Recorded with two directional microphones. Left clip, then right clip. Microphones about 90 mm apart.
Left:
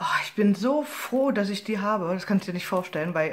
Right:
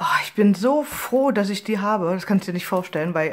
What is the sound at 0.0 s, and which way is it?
Speech, 55° right (ahead or behind).